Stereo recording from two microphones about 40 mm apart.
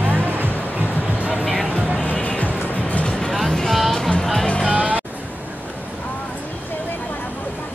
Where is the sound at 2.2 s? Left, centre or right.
Left.